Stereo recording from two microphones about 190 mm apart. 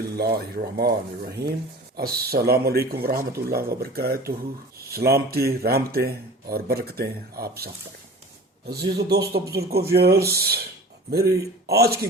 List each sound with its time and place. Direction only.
0.2 s speech: 55° right (ahead or behind)
8.7 s speech: 55° right (ahead or behind)